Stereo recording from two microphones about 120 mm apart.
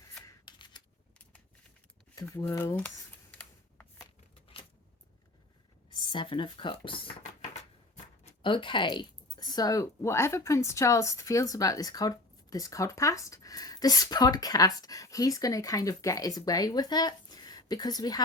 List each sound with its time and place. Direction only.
0.2 s scissors: 40° left (ahead or behind)
2.2 s speech: 20° left (ahead or behind)
5.9 s speech: 40° left (ahead or behind)
8.4 s speech: 45° left (ahead or behind)